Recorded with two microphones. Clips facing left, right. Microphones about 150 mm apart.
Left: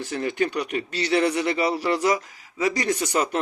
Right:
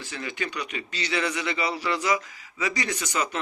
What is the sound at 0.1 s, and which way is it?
A man's voice, 50° left (ahead or behind).